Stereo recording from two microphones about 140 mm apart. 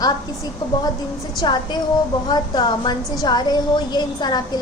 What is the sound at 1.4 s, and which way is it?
A woman's voice, 30° left (ahead or behind).